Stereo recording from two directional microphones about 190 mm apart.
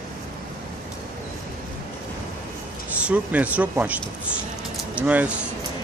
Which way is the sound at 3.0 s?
5° right (ahead or behind).